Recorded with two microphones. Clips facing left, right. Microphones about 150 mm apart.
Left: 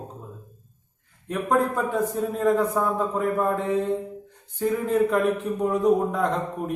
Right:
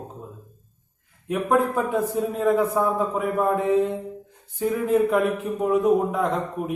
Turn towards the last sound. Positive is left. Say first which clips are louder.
# right 1 dB
turn(degrees=-5)  # may be behind; listen again after turning